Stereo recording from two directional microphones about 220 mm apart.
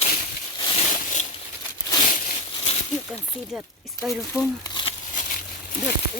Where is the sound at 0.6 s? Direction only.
25° left (ahead or behind).